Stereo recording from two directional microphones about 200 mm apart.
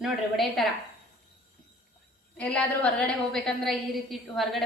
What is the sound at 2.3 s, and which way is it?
A woman's voice, 5° left (ahead or behind).